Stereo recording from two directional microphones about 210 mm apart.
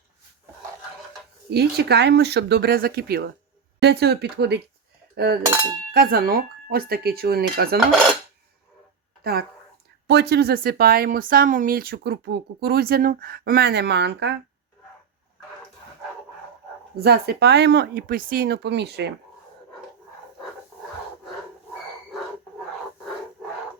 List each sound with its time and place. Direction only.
1.5 s speech: 50° right (ahead or behind)
5.1 s a sound: 50° right (ahead or behind)
5.9 s speech: 45° right (ahead or behind)
10.1 s speech: 50° right (ahead or behind)
17.0 s speech: 50° right (ahead or behind)